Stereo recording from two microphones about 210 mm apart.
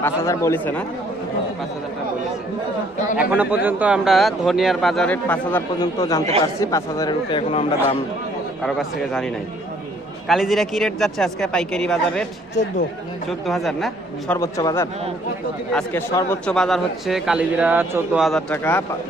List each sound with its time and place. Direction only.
0.0 s speech: 10° left (ahead or behind)
3.2 s a man's voice: 5° right (ahead or behind); by 7.9 s 25° left (ahead or behind)
8.6 s a man's voice: centre (ahead or behind)
13.5 s a man's voice: centre (ahead or behind)
14.3 s a man's voice: 15° left (ahead or behind)